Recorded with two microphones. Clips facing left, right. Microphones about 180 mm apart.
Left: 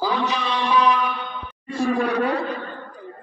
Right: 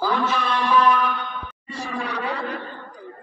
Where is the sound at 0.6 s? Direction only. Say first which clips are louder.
Even; 15° left (ahead or behind).